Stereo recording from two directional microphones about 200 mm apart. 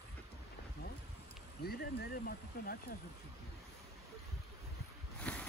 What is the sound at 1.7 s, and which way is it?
Speech, 50° left (ahead or behind).